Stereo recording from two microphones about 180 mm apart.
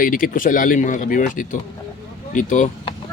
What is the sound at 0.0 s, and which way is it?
Speech, 50° left (ahead or behind).